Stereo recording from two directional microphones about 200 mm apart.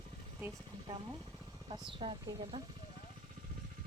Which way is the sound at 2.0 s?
30° right (ahead or behind).